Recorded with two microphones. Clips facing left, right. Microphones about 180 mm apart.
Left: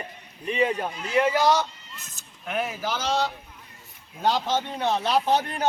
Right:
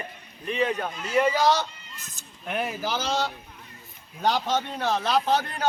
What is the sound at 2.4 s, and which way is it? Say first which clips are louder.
Speech: even; centre (ahead or behind).